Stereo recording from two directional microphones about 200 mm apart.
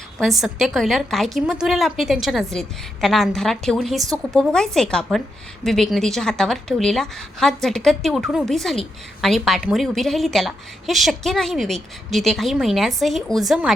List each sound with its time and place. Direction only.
0.2 s a woman's voice: centre (ahead or behind)